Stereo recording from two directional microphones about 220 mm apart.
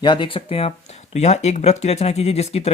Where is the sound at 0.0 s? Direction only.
20° left (ahead or behind).